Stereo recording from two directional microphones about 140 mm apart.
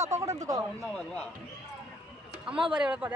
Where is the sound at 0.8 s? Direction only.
10° left (ahead or behind).